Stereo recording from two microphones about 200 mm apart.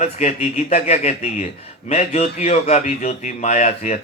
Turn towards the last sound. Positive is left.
turn(degrees=35)  # may be behind; listen again after turning